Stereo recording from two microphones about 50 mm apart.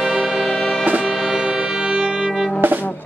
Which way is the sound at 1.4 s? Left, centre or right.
Centre.